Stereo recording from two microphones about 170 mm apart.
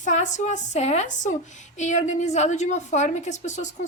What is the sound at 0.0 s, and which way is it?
A woman's voice, 45° left (ahead or behind).